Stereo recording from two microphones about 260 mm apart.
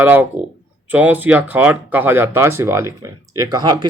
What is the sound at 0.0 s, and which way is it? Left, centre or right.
A man's voice, centre.